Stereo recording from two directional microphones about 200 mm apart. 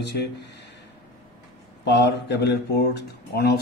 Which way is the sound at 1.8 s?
55° left (ahead or behind).